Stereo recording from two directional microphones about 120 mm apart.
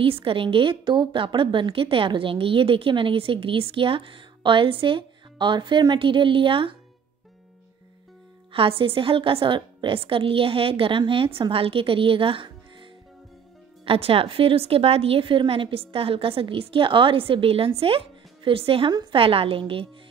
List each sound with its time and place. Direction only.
0.0 s a woman's voice: 50° right (ahead or behind)
8.5 s a woman's voice: 50° right (ahead or behind)
13.8 s a woman's voice: 55° right (ahead or behind)